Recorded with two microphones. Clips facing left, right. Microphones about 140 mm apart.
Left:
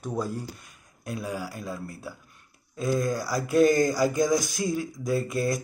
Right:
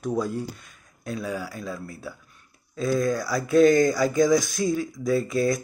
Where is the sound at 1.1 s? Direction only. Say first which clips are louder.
Right 2 dB; 10° left (ahead or behind).